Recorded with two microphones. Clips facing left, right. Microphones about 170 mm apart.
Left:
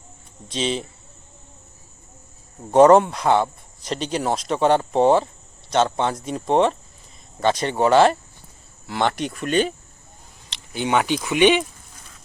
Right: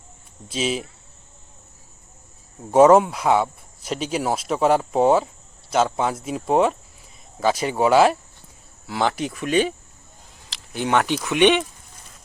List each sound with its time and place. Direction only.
0.4 s speech: 5° right (ahead or behind)
2.7 s speech: 5° right (ahead or behind)